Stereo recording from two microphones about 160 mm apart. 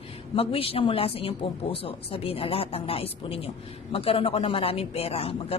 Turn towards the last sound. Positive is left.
turn(degrees=35)  # may be behind; listen again after turning